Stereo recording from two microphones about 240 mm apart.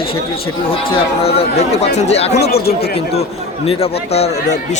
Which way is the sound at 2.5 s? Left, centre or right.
Left.